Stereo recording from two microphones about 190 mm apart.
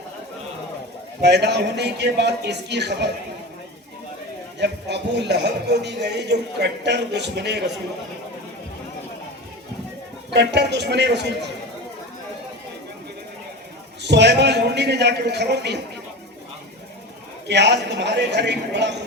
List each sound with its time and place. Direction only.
1.2 s a man's voice: 60° right (ahead or behind)
4.6 s a man's voice: 65° right (ahead or behind)
10.3 s a man's voice: 60° right (ahead or behind)
14.0 s a man's voice: 65° right (ahead or behind)
17.5 s a man's voice: 65° right (ahead or behind)